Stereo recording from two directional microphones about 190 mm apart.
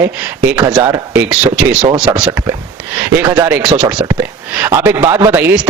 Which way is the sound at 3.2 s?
15° right (ahead or behind).